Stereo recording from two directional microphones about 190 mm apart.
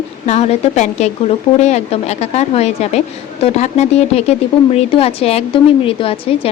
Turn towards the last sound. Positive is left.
turn(degrees=30)  # may be behind; listen again after turning